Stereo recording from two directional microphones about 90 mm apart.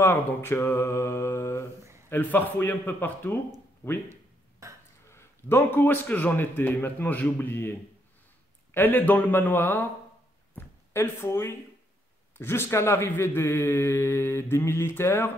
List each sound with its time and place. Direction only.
0.0 s a man's voice: 25° left (ahead or behind)
4.1 s a sound: 35° right (ahead or behind)
5.1 s a man's voice: 25° left (ahead or behind)
8.7 s a man's voice: 20° left (ahead or behind)
10.9 s a man's voice: 30° left (ahead or behind)